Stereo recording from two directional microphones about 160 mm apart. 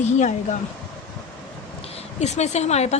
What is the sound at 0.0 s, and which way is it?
Speech, 45° left (ahead or behind).